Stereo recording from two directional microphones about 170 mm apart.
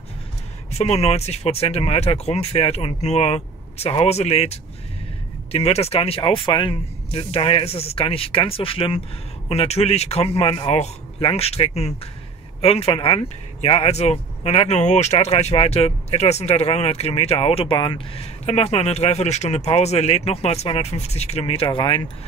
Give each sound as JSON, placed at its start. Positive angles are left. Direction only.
{"t": 0.7, "sound": "speech", "side_deg": 40}